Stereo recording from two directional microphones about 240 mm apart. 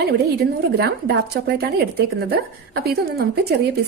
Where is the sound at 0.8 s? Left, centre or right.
Right.